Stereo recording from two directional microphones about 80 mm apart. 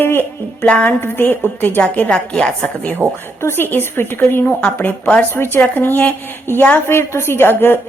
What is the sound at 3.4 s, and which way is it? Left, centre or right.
A woman's voice, left.